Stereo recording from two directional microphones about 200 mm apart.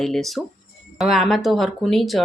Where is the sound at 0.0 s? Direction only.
Centre (ahead or behind).